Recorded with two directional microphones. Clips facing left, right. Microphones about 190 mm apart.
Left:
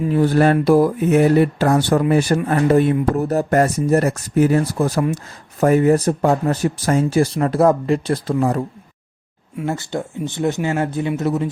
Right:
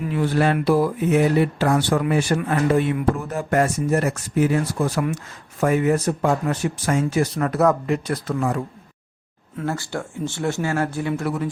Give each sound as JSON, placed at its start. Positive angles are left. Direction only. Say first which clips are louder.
{"t": 0.1, "sound": "speech", "louder": "left 5 dB", "side_deg": 40}
{"t": 9.6, "sound": "speech", "louder": "left 3 dB", "side_deg": 20}